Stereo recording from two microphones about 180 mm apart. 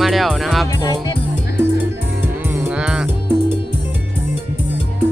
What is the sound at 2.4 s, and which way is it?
Music, 10° right (ahead or behind).